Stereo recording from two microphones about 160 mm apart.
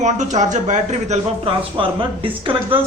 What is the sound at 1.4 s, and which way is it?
Speech, 35° right (ahead or behind).